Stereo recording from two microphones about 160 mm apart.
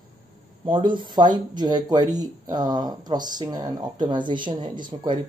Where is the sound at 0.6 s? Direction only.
30° right (ahead or behind).